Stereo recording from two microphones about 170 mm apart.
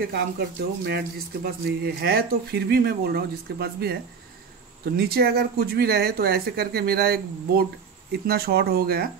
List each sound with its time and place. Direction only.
0.0 s speech: 65° right (ahead or behind)